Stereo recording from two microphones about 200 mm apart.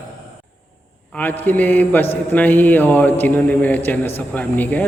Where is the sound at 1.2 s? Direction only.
10° left (ahead or behind).